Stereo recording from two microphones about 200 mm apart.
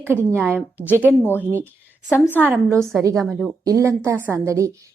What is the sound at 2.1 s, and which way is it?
Speech, 10° left (ahead or behind).